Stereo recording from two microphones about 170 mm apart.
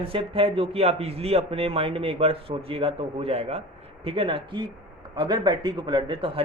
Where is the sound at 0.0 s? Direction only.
30° right (ahead or behind).